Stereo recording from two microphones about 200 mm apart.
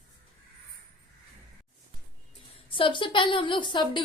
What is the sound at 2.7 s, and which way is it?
A woman's voice, 25° left (ahead or behind).